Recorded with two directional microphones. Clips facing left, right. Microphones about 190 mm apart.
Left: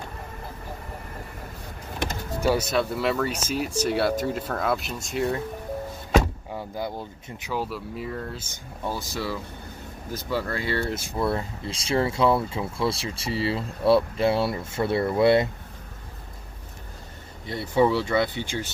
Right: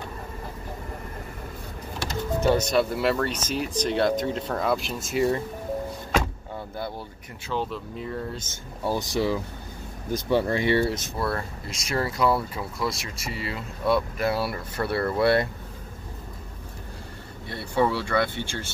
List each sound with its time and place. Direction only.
2.4 s speech: 10° left (ahead or behind)
6.7 s speech: 15° left (ahead or behind)
8.8 s speech: 15° right (ahead or behind)
11.1 s speech: 20° left (ahead or behind)
17.5 s speech: 20° left (ahead or behind)